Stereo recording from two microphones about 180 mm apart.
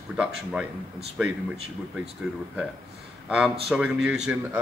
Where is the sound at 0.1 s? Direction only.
5° right (ahead or behind).